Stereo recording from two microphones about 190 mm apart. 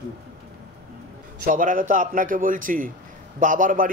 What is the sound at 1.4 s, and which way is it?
A man's voice, 45° right (ahead or behind).